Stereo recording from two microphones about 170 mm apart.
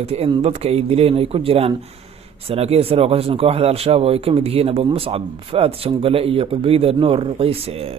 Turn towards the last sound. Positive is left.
turn(degrees=-35)  # may be behind; listen again after turning